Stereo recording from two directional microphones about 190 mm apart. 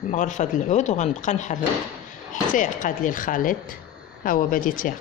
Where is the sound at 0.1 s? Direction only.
40° left (ahead or behind).